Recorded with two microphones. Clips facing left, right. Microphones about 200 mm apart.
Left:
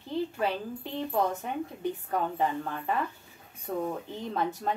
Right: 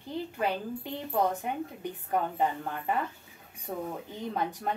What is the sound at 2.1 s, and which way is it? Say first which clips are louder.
Speech: right 2 dB; 15° right (ahead or behind).